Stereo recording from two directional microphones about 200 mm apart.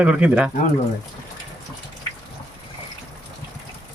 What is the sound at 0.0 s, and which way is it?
Speech, 5° right (ahead or behind).